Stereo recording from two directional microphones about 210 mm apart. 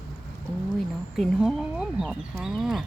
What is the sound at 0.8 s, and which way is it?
A woman's voice, centre (ahead or behind).